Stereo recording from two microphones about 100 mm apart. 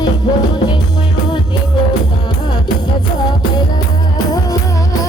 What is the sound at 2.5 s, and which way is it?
Music, 45° left (ahead or behind).